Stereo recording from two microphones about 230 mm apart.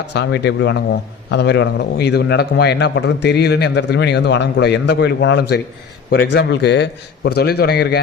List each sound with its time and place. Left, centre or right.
0.1 s a man's voice: left